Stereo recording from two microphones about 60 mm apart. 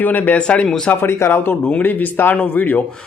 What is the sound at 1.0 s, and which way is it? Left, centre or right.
Speech, left.